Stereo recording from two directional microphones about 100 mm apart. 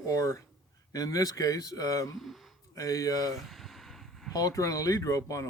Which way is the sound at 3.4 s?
Centre (ahead or behind).